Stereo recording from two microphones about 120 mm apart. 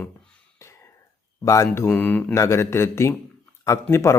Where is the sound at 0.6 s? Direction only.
20° left (ahead or behind).